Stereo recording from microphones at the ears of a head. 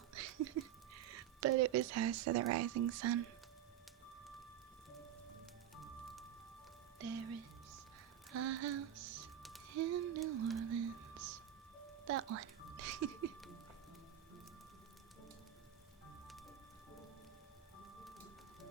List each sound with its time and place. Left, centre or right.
0.1 s speech: right
8.3 s music: right